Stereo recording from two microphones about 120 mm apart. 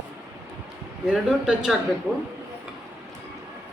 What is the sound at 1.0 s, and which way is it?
Speech, 10° right (ahead or behind).